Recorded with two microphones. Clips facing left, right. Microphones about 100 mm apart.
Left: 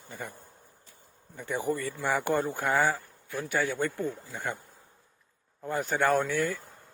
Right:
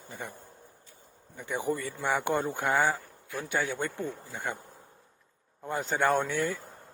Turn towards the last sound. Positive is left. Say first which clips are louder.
# left 1 dB
turn(degrees=-20)  # may be behind; listen again after turning